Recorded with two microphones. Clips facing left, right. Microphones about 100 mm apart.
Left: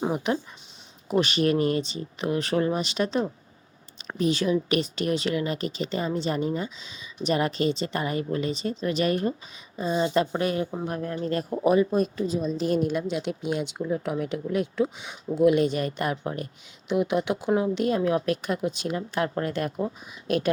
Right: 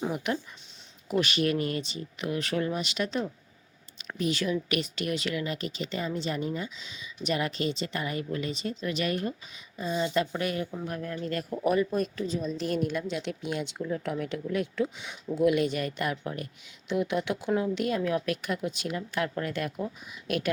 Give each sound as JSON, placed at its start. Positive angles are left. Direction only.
{"t": 0.0, "sound": "a woman's voice", "side_deg": 30}
{"t": 16.9, "sound": "a woman's voice", "side_deg": 20}